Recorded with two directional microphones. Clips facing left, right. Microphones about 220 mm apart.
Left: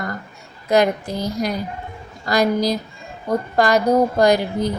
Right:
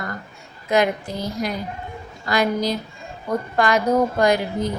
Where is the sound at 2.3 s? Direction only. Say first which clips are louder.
Left 3 dB; 40° left (ahead or behind).